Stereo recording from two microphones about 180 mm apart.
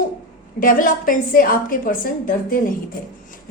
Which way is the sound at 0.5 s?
50° left (ahead or behind).